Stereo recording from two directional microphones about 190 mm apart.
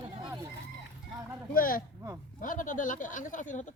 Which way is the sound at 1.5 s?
50° left (ahead or behind).